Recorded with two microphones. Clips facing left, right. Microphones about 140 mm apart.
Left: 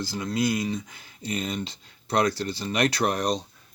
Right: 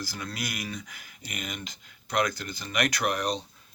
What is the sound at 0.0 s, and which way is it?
Speech, 25° left (ahead or behind).